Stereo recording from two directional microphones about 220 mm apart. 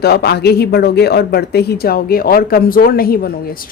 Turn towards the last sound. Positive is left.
turn(degrees=45)  # may be behind; listen again after turning